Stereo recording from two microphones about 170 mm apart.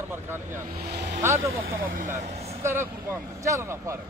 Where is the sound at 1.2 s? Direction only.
15° right (ahead or behind).